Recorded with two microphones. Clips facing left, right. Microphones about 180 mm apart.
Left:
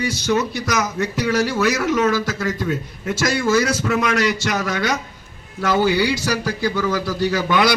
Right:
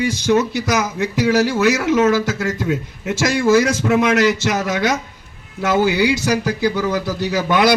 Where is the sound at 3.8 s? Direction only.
20° right (ahead or behind).